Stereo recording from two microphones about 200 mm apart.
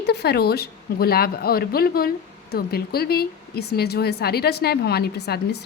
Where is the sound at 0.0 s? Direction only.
55° left (ahead or behind).